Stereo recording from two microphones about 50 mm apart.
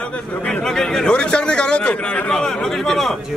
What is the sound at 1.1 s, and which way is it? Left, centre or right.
A man's voice, centre.